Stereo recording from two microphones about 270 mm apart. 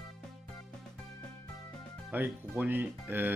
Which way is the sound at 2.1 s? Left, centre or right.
Centre.